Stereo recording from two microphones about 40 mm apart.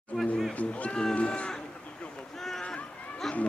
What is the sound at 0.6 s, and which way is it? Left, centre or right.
Speech, left.